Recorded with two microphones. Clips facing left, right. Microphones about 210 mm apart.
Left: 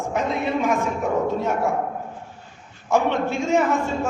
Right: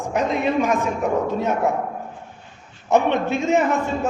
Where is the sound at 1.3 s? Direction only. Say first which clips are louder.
Right 2 dB; 20° right (ahead or behind).